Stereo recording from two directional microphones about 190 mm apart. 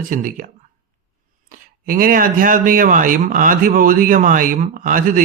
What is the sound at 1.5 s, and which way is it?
Speech, 45° right (ahead or behind).